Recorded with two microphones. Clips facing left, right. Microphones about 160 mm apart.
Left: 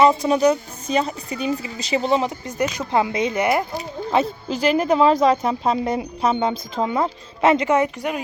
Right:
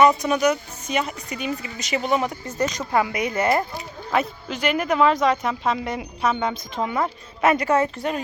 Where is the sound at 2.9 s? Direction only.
25° left (ahead or behind).